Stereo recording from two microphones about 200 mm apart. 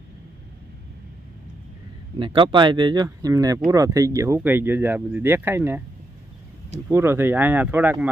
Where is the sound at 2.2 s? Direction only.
25° right (ahead or behind).